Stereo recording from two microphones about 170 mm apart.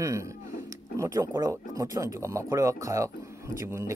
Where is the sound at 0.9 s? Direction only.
15° right (ahead or behind).